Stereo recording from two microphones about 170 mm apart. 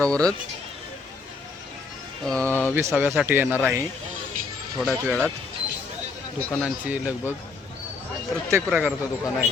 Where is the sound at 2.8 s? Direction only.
15° right (ahead or behind).